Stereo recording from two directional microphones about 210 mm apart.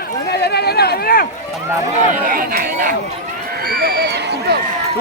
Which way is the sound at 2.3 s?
45° right (ahead or behind).